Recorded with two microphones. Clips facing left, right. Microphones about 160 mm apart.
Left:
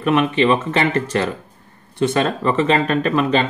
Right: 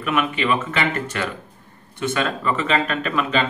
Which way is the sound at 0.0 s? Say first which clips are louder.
Left 6 dB; 30° left (ahead or behind).